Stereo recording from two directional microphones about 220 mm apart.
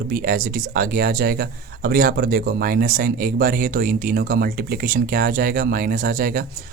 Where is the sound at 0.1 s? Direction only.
40° right (ahead or behind).